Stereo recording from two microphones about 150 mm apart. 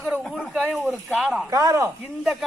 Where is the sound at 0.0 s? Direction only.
Centre (ahead or behind).